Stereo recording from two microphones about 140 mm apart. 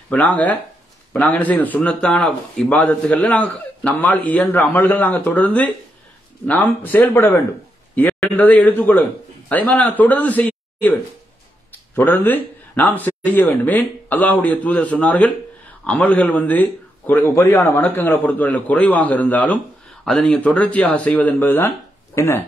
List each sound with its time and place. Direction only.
0.1 s speech: 10° left (ahead or behind)